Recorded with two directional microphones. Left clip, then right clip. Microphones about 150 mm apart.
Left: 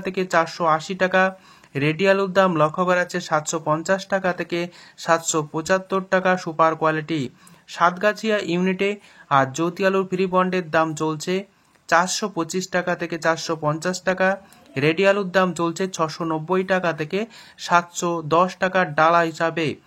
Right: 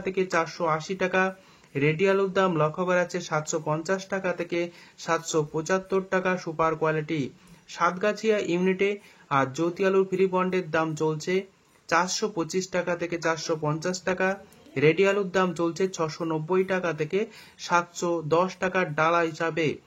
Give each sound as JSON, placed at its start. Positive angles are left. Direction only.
{"t": 0.0, "sound": "speech", "side_deg": 30}